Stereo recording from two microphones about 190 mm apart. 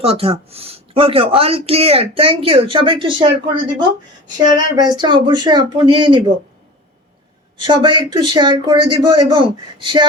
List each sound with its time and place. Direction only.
0.0 s speech: 30° right (ahead or behind)
7.6 s speech: 25° right (ahead or behind)